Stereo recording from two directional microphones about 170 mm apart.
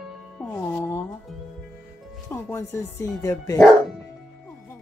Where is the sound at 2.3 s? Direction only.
15° left (ahead or behind).